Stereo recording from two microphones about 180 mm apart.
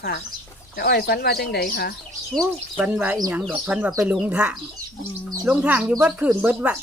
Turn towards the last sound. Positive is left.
turn(degrees=-5)  # may be behind; listen again after turning